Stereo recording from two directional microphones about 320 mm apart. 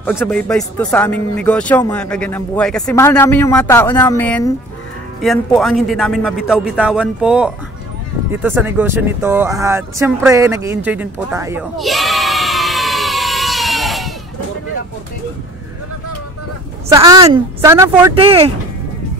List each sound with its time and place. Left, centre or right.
0.0 s speech: centre
16.9 s a woman's voice: centre